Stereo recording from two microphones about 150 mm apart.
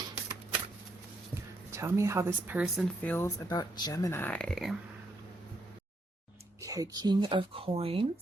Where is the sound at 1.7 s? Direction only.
20° right (ahead or behind).